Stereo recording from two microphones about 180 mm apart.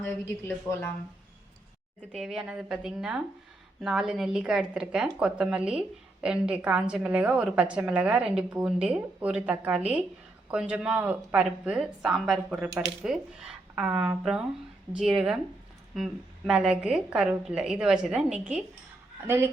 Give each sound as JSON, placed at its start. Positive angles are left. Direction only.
{"t": 0.0, "sound": "a woman's voice", "side_deg": 10}
{"t": 2.1, "sound": "a woman's voice", "side_deg": 0}
{"t": 16.5, "sound": "a woman's voice", "side_deg": -5}